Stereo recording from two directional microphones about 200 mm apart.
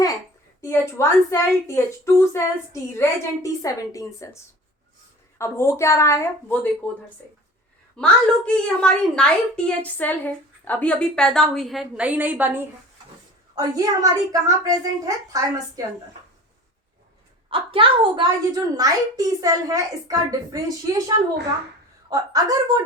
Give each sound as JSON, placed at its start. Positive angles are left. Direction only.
{"t": 0.6, "sound": "a woman's voice", "side_deg": 15}
{"t": 5.4, "sound": "a woman's voice", "side_deg": 15}
{"t": 8.0, "sound": "a woman's voice", "side_deg": 5}
{"t": 13.6, "sound": "a woman's voice", "side_deg": -20}
{"t": 17.5, "sound": "a woman's voice", "side_deg": -25}
{"t": 22.1, "sound": "a woman's voice", "side_deg": -15}